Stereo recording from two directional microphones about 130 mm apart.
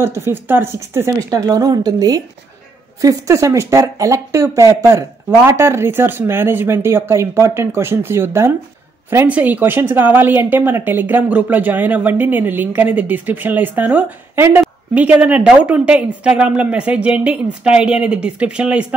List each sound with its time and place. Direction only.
0.0 s a woman's voice: 20° right (ahead or behind)
1.3 s a woman's voice: 30° right (ahead or behind); by 18.9 s 10° right (ahead or behind)